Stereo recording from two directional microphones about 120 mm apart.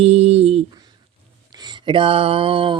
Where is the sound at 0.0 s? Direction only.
60° right (ahead or behind).